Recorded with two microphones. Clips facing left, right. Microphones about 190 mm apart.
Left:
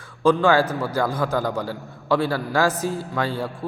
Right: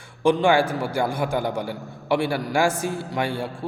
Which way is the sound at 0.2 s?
25° right (ahead or behind).